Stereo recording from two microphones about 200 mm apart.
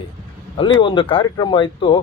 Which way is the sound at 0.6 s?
25° left (ahead or behind).